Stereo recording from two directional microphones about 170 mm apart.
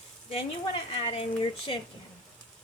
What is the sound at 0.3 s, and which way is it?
Speech, 35° left (ahead or behind).